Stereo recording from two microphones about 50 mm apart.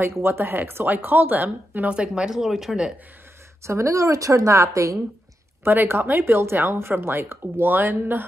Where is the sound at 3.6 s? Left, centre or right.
Right.